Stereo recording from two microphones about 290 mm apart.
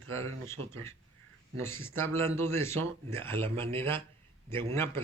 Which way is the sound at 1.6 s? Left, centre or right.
Centre.